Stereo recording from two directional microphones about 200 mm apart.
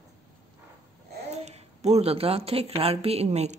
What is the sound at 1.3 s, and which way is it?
A child's voice, 30° right (ahead or behind).